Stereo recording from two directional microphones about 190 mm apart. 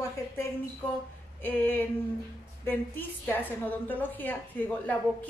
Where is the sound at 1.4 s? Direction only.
10° left (ahead or behind).